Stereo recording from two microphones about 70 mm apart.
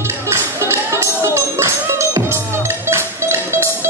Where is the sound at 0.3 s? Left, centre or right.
Right.